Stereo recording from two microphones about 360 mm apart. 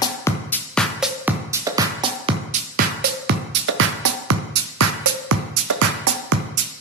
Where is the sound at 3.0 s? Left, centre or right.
Right.